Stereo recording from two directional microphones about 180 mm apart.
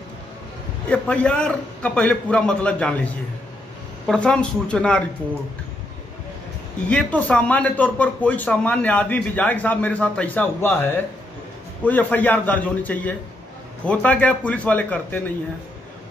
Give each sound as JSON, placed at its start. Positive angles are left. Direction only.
{"t": 0.8, "sound": "a man's voice", "side_deg": 5}
{"t": 4.1, "sound": "speech", "side_deg": 5}
{"t": 6.9, "sound": "a man's voice", "side_deg": 5}